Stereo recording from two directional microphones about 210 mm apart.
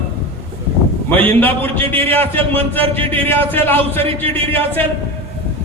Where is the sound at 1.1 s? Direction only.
10° left (ahead or behind).